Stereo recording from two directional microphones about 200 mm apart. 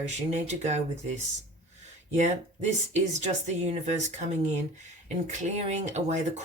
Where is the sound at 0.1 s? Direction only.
35° right (ahead or behind).